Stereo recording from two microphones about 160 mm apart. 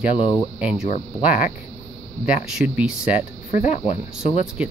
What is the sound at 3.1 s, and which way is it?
Speech, 50° left (ahead or behind).